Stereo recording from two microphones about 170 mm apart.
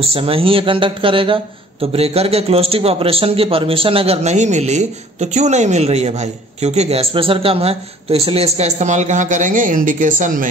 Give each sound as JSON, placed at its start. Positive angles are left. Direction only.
{"t": 0.0, "sound": "speech", "side_deg": -35}